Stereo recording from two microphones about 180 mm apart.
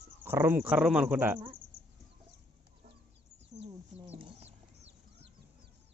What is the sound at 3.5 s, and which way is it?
Chicken, 35° right (ahead or behind).